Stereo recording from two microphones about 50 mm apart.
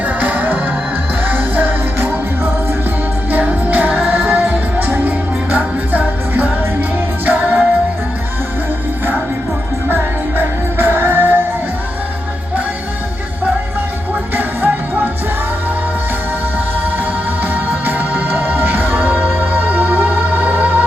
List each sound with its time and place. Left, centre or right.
0.0 s music: right
9.9 s music: right
14.3 s music: right
17.4 s music: right